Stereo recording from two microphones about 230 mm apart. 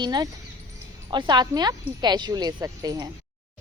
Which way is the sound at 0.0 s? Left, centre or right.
Centre.